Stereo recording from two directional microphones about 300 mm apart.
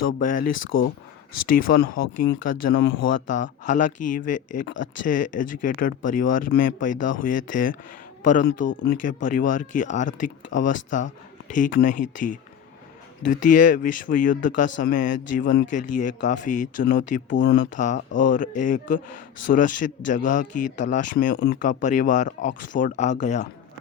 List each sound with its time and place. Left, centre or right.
0.2 s a man's voice: left
17.3 s speech: left
17.7 s a man's voice: left